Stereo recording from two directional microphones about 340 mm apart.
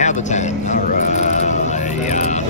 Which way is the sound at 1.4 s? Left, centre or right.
Left.